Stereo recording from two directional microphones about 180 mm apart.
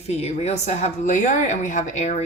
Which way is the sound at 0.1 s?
35° left (ahead or behind).